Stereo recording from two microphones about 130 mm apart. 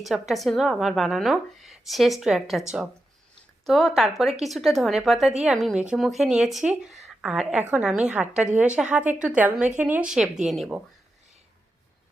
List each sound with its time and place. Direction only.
0.0 s speech: centre (ahead or behind)
3.7 s a woman's voice: 5° left (ahead or behind)